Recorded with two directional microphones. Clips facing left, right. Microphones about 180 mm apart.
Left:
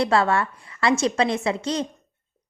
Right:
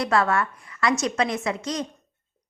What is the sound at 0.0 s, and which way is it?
A woman's voice, 30° left (ahead or behind).